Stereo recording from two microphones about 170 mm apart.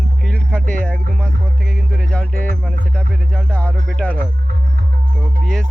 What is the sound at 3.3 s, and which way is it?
Music, 5° left (ahead or behind).